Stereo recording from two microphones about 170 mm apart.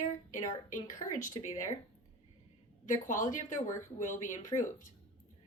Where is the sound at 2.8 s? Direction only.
50° left (ahead or behind).